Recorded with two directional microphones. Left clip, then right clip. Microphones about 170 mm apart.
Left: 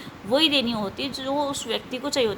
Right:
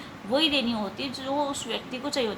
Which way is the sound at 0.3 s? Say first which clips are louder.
Left 4 dB; 50° left (ahead or behind).